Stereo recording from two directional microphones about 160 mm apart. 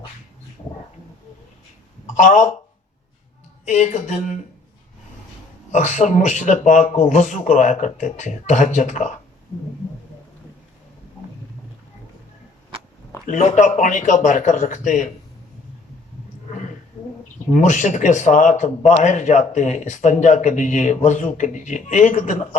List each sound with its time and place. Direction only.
2.1 s speech: 50° left (ahead or behind)
3.7 s a man's voice: 50° left (ahead or behind)
5.7 s a man's voice: 50° left (ahead or behind)
13.2 s a man's voice: 50° left (ahead or behind)
17.5 s a man's voice: 50° left (ahead or behind)